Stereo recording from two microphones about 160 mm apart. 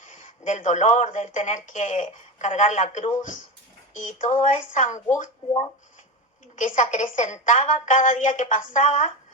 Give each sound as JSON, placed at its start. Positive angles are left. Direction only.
{"t": 0.0, "sound": "speech", "side_deg": 50}